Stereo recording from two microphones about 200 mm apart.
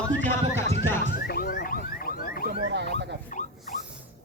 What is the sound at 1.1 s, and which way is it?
Music, 50° left (ahead or behind).